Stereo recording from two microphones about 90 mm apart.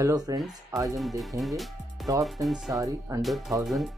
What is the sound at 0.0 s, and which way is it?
Speech, 40° right (ahead or behind).